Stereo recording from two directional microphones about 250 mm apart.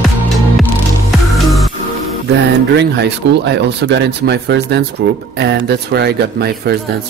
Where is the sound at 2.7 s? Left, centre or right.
Right.